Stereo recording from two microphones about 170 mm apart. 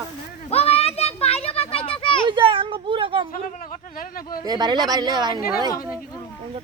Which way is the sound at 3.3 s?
50° left (ahead or behind).